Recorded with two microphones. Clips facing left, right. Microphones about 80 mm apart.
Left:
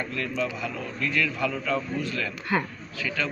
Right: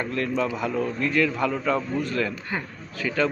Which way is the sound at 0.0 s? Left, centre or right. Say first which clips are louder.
Right 4 dB; right.